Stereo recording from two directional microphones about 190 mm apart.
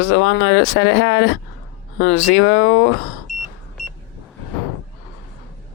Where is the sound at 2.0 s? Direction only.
80° left.